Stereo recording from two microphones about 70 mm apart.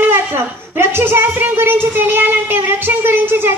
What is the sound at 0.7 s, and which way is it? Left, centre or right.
Child singing, right.